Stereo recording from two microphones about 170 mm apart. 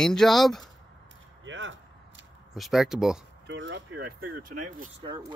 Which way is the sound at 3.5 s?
90° right.